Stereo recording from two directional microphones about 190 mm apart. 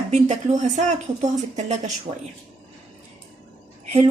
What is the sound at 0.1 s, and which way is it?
Speech, 40° right (ahead or behind).